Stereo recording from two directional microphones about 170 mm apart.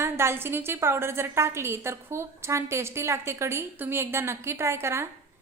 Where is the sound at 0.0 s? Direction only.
15° right (ahead or behind).